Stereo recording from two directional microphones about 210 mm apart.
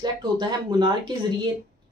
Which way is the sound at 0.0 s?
20° right (ahead or behind).